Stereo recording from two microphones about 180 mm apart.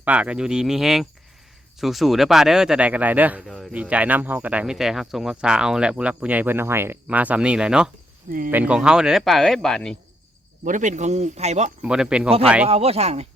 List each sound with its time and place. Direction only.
0.0 s speech: 5° right (ahead or behind)
10.6 s speech: 45° right (ahead or behind)
11.8 s speech: 5° right (ahead or behind)
12.6 s speech: 35° right (ahead or behind)